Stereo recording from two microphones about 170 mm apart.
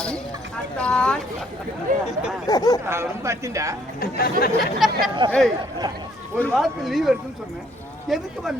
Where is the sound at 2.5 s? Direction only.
20° left (ahead or behind).